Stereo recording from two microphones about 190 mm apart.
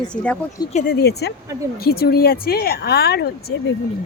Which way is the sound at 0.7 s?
50° left (ahead or behind).